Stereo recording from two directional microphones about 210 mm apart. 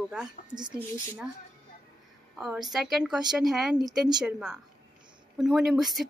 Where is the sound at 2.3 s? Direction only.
5° right (ahead or behind).